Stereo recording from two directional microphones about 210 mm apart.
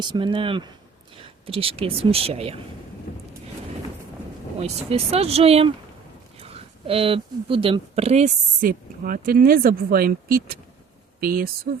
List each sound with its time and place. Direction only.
0.0 s speech: 25° right (ahead or behind)
3.1 s a sound: 35° left (ahead or behind)
4.5 s speech: 30° right (ahead or behind); by 11.7 s 45° right (ahead or behind)